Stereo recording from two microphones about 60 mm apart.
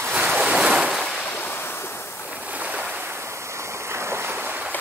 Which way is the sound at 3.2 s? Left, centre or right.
Right.